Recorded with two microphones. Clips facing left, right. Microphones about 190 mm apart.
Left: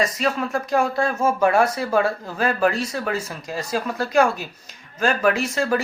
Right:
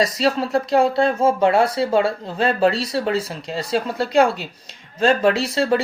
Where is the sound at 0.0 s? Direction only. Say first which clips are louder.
Right 3 dB; 35° right (ahead or behind).